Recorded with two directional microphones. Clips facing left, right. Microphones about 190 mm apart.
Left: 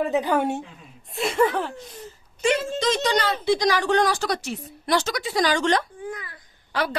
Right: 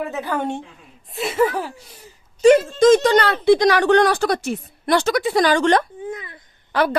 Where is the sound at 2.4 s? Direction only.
50° right (ahead or behind).